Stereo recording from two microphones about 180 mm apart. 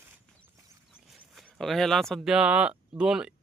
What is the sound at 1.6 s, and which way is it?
Speech, centre (ahead or behind).